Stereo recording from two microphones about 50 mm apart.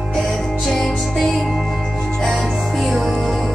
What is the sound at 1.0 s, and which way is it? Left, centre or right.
Music, centre.